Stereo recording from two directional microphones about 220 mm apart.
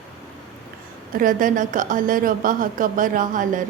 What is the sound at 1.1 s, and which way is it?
A woman's voice, 35° right (ahead or behind).